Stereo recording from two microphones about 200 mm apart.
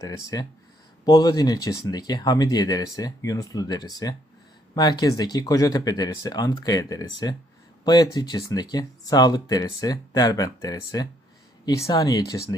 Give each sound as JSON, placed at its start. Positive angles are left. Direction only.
{"t": 0.3, "sound": "speech", "side_deg": 20}